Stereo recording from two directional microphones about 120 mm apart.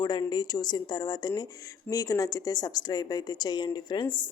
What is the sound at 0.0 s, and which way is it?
A woman's voice, 35° left (ahead or behind).